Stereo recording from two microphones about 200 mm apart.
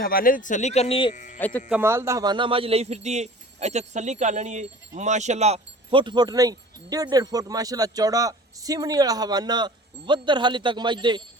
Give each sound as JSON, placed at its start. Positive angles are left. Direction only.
{"t": 0.0, "sound": "speech", "side_deg": 45}
{"t": 1.1, "sound": "speech", "side_deg": 40}
{"t": 1.4, "sound": "speech", "side_deg": 5}
{"t": 1.7, "sound": "speech", "side_deg": -10}